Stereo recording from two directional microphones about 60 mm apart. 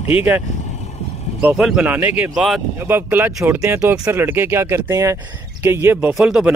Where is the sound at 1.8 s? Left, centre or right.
Right.